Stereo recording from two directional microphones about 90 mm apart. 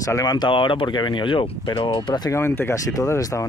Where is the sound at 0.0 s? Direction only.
40° left (ahead or behind).